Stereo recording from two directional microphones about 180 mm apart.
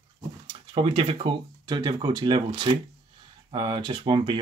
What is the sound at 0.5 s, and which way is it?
Speech, 30° right (ahead or behind).